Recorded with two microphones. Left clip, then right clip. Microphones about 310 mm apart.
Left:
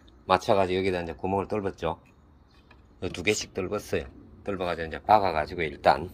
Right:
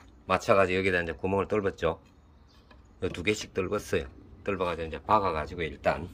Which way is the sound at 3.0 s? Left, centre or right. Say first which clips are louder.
Left 2 dB; centre.